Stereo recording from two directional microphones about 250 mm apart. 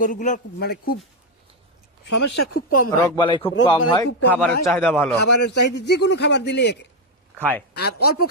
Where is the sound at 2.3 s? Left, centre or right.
Left.